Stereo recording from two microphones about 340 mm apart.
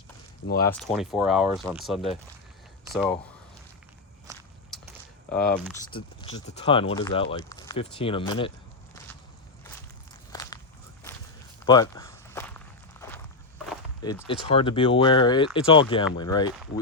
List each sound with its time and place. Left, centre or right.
0.4 s speech: left
0.8 s speech: centre
5.3 s speech: centre
5.9 s speech: centre
10.3 s walk: centre
11.6 s walk: centre
14.0 s speech: centre